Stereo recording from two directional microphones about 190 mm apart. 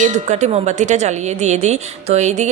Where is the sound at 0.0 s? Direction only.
40° right (ahead or behind).